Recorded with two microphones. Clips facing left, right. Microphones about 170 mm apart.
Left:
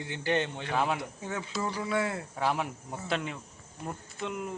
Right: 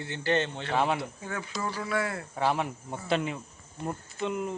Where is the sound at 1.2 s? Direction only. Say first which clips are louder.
Left 1 dB; 20° left (ahead or behind).